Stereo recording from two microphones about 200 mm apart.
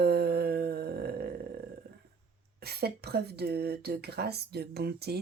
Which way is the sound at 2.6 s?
55° right (ahead or behind).